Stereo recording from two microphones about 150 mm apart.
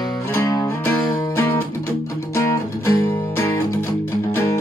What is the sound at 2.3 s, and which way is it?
Music, 20° left (ahead or behind).